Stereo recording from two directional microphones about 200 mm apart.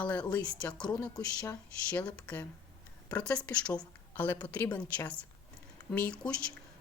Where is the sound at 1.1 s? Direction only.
15° left (ahead or behind).